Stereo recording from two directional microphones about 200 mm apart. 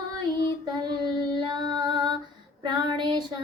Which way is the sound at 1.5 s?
20° right (ahead or behind).